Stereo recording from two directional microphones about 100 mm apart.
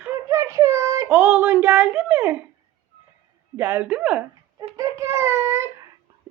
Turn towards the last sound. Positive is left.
turn(degrees=-25)  # may be behind; listen again after turning